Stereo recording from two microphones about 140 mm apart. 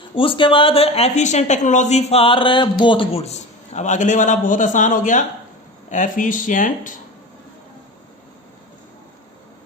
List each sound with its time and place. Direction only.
0.1 s speech: 40° left (ahead or behind); by 7.0 s 65° left (ahead or behind)